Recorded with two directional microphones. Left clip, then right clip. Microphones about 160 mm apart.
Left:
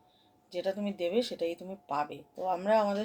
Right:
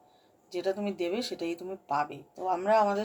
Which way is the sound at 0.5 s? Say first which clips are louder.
Right 2 dB; 15° left (ahead or behind).